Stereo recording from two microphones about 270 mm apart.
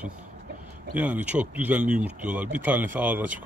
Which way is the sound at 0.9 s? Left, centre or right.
Centre.